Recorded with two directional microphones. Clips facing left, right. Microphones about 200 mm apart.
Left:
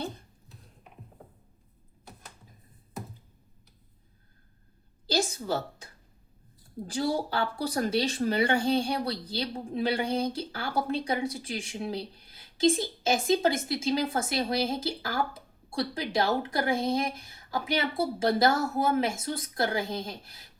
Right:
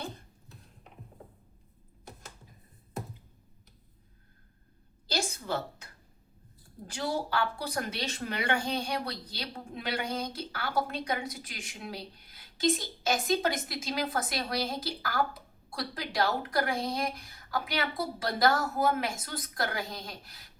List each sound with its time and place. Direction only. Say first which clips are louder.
6.9 s a woman's voice: left 3 dB; 30° left (ahead or behind)